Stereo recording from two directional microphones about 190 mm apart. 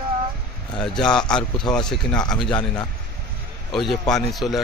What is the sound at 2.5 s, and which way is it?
Speech, 25° left (ahead or behind).